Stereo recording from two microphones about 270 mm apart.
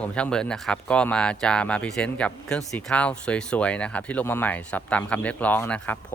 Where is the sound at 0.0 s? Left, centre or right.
Centre.